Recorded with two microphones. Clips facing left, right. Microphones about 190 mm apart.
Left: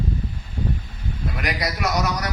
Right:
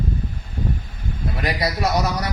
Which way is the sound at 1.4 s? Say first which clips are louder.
Right 3 dB; 30° right (ahead or behind).